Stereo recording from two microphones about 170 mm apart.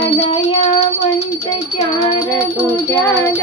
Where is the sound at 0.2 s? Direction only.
35° left (ahead or behind).